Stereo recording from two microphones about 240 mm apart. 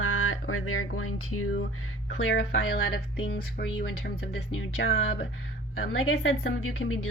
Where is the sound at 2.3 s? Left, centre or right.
Left.